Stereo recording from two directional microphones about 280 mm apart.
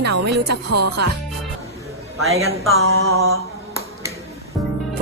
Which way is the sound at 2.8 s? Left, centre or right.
Right.